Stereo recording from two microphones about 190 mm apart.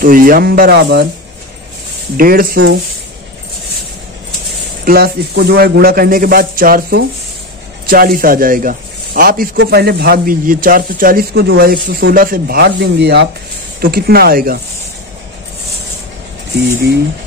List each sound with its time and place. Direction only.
0.0 s speech: 50° right (ahead or behind)
2.1 s speech: 50° right (ahead or behind)
4.8 s speech: 50° right (ahead or behind)